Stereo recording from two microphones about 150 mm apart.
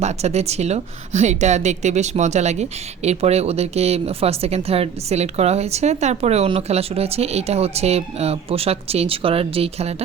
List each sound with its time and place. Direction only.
0.0 s a woman's voice: 45° right (ahead or behind)